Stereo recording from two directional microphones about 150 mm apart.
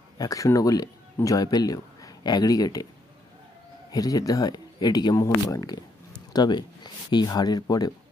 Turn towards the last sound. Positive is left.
turn(degrees=25)  # may be behind; listen again after turning